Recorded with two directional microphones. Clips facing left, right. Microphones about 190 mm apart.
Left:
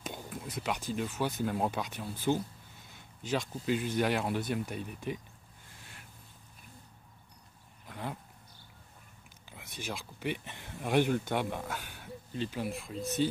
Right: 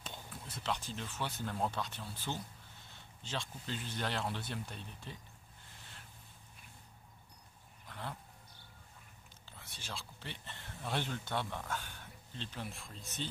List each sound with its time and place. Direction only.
0.0 s speech: 15° left (ahead or behind)
7.9 s dog: 15° left (ahead or behind)
9.5 s speech: 15° left (ahead or behind)